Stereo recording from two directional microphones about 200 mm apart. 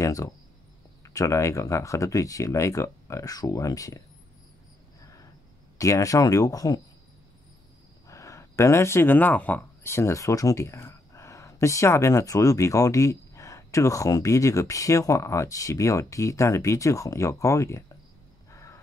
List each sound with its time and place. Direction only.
0.0 s speech: 15° left (ahead or behind)
5.8 s speech: 15° left (ahead or behind)
8.1 s speech: 15° left (ahead or behind)
18.5 s a sound: 15° left (ahead or behind)